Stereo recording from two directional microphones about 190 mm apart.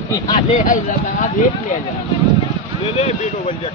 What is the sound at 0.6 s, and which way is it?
Speech, 40° left (ahead or behind).